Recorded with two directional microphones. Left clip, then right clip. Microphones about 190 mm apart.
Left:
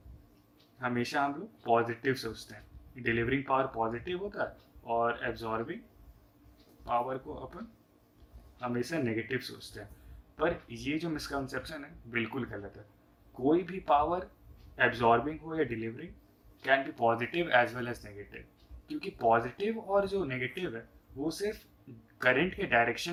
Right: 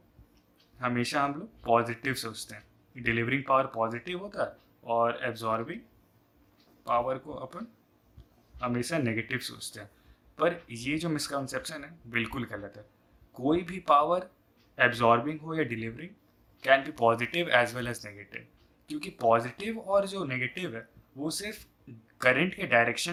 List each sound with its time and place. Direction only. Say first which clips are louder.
0.8 s speech: right 3 dB; 45° right (ahead or behind)
6.8 s speech: right 4 dB; 40° right (ahead or behind)